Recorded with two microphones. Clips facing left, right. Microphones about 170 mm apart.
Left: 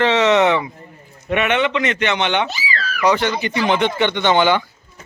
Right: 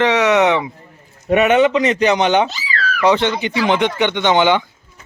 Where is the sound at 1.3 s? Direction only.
40° right (ahead or behind).